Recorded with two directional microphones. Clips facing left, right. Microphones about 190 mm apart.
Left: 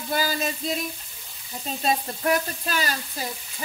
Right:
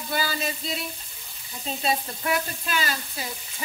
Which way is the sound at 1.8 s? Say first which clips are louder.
Left 3 dB; 45° left (ahead or behind).